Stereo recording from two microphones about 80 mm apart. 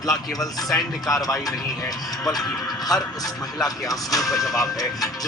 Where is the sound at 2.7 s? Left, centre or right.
Left.